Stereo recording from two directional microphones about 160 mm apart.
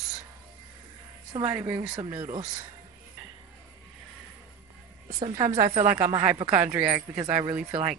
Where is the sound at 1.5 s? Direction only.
10° right (ahead or behind).